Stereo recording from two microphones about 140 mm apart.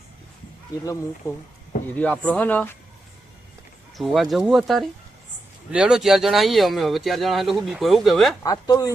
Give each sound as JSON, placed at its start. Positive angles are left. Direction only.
{"t": 1.2, "sound": "speech", "side_deg": 20}
{"t": 2.0, "sound": "speech", "side_deg": 10}
{"t": 3.9, "sound": "speech", "side_deg": 0}
{"t": 8.4, "sound": "speech", "side_deg": 25}